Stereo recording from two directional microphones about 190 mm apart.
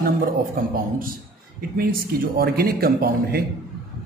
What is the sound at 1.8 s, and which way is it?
A man's voice, 50° right (ahead or behind).